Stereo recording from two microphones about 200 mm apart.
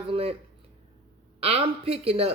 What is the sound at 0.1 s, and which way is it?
Speech, 30° right (ahead or behind).